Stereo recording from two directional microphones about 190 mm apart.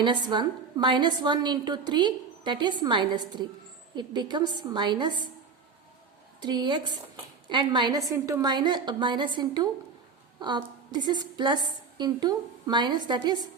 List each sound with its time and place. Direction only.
0.0 s a woman's voice: 25° right (ahead or behind)
6.4 s a woman's voice: 25° right (ahead or behind)